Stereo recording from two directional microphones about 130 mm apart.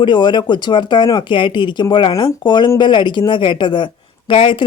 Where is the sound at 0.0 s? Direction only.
35° left (ahead or behind).